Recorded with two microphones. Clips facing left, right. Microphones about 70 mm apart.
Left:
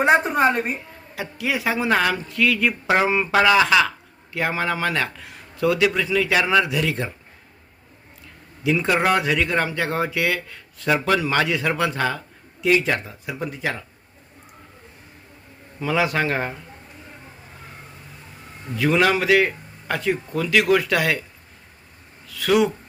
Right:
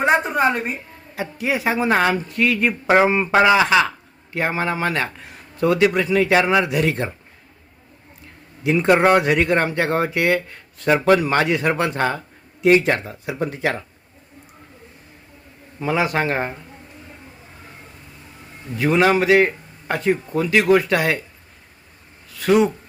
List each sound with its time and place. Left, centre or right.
0.0 s a woman's voice: centre
1.1 s speech: right
6.4 s speech: centre
6.7 s speech: right
8.9 s speech: right
15.8 s a man's voice: right
18.8 s speech: right
22.4 s speech: right